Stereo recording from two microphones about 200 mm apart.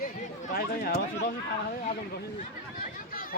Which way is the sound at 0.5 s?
50° left (ahead or behind).